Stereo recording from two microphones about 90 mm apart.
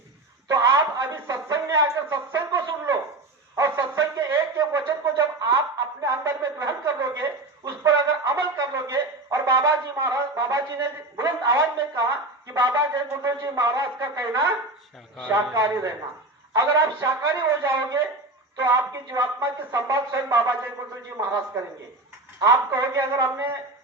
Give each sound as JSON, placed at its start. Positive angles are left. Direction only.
{"t": 0.4, "sound": "a sound", "side_deg": -35}
{"t": 12.5, "sound": "speech", "side_deg": -30}
{"t": 12.9, "sound": "speech", "side_deg": -40}
{"t": 15.3, "sound": "speech", "side_deg": -35}
{"t": 22.4, "sound": "speech", "side_deg": -35}
{"t": 23.2, "sound": "speech", "side_deg": -25}